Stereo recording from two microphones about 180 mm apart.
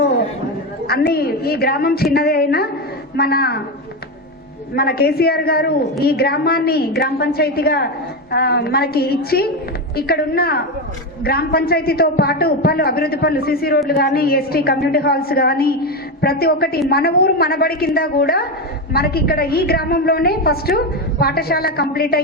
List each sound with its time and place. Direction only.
0.9 s a woman's voice: 60° left (ahead or behind)
4.7 s a woman's voice: 60° left (ahead or behind)